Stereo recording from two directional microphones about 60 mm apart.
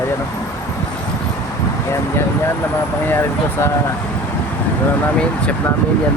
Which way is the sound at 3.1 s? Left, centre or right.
Left.